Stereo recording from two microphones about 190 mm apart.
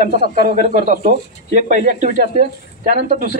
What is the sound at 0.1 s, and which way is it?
Speech, 50° right (ahead or behind).